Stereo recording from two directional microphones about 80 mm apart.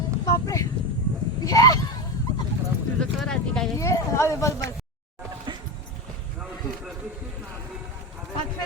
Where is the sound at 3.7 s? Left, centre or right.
Left.